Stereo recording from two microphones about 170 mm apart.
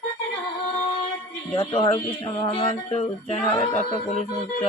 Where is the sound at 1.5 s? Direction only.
30° left (ahead or behind).